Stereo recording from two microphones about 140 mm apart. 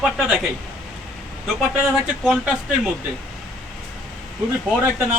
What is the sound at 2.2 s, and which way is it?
Speech, 5° right (ahead or behind).